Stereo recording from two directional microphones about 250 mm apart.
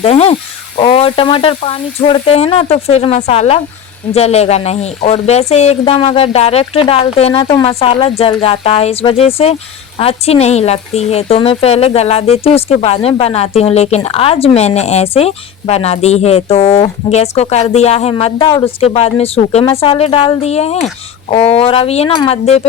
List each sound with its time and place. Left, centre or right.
0.0 s speech: left